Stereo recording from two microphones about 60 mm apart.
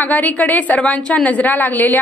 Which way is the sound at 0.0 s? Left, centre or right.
Left.